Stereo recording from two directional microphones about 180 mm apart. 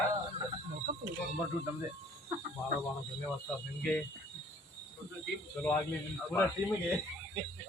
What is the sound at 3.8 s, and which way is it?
Speech, 5° left (ahead or behind).